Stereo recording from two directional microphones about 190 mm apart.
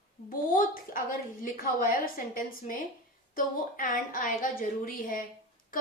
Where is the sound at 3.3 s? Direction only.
45° left (ahead or behind).